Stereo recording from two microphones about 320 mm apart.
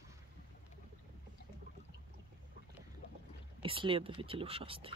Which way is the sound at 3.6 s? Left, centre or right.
Centre.